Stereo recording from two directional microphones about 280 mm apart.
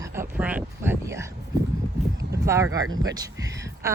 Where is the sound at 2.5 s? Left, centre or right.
Centre.